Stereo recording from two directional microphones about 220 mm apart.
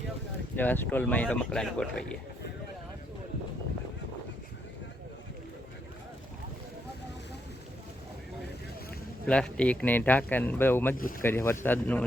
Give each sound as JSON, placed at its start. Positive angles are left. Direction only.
{"t": 0.5, "sound": "speech", "side_deg": 10}
{"t": 9.2, "sound": "speech", "side_deg": 5}
{"t": 10.9, "sound": "speech", "side_deg": 40}
{"t": 11.2, "sound": "speech", "side_deg": 10}